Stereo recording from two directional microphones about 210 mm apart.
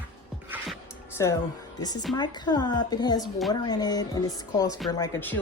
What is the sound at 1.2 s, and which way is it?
A woman's voice, 15° left (ahead or behind).